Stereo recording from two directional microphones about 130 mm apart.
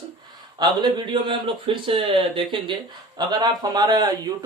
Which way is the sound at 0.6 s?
35° right (ahead or behind).